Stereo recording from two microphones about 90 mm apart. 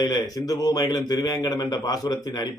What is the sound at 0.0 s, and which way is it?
Speech, 45° left (ahead or behind).